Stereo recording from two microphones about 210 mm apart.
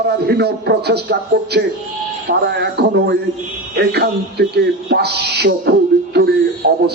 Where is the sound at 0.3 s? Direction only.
50° right (ahead or behind).